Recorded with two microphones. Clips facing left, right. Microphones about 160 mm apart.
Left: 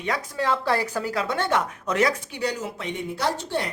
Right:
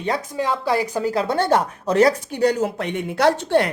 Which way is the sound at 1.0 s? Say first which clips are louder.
Right 5 dB; 25° right (ahead or behind).